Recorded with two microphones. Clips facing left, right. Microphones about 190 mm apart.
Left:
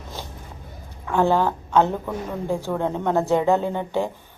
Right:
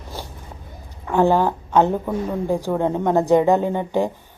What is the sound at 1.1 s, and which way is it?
A woman's voice, 15° right (ahead or behind).